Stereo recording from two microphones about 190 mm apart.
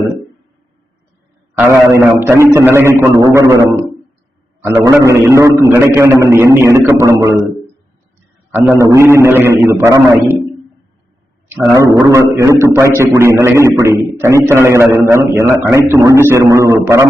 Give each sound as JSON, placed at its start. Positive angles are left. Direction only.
{"t": 2.2, "sound": "a man's voice", "side_deg": -15}
{"t": 8.5, "sound": "a man's voice", "side_deg": -10}
{"t": 11.4, "sound": "a man's voice", "side_deg": -10}